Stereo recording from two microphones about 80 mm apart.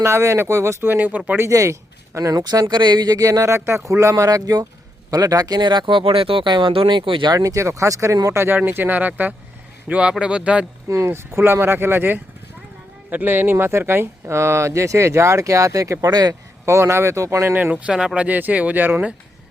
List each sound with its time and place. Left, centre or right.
0.0 s speech: right; by 1.4 s centre
1.4 s speech: right
7.3 s speech: right; by 10.7 s centre
10.8 s speech: right
16.6 s speech: right
17.5 s speech: centre